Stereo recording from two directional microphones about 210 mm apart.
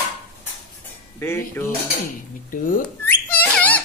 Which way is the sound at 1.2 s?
10° left (ahead or behind).